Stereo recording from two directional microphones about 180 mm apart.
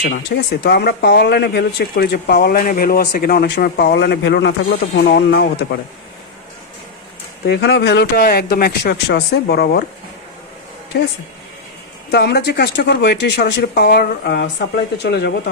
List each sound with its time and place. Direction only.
0.1 s speech: 60° left (ahead or behind)
7.4 s speech: 65° left (ahead or behind)
10.9 s speech: 65° left (ahead or behind)
12.1 s speech: 65° left (ahead or behind)